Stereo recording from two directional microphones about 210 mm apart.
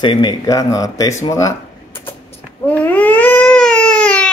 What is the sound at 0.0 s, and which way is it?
Speech, 20° left (ahead or behind).